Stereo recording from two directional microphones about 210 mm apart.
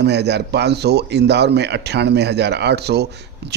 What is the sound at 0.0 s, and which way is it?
A man's voice, 55° right (ahead or behind).